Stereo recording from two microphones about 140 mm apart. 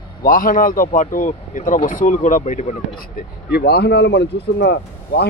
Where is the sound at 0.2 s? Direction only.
80° left; by 2.7 s 55° left (ahead or behind).